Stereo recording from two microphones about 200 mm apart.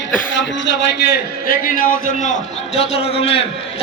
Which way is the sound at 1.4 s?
45° left (ahead or behind).